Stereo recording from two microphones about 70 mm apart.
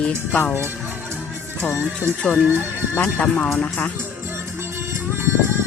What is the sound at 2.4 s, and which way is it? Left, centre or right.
Speech, right.